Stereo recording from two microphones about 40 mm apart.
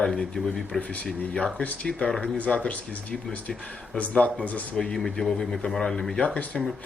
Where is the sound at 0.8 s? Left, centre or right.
Left.